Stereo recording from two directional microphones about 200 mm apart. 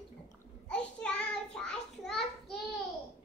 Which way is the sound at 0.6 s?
5° left (ahead or behind).